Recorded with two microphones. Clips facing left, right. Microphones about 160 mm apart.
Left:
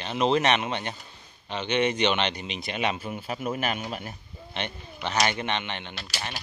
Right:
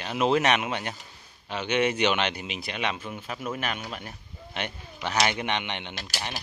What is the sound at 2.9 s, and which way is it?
Speech, 5° left (ahead or behind).